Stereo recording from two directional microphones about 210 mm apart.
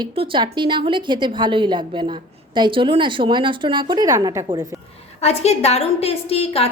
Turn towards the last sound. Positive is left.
turn(degrees=30)  # may be behind; listen again after turning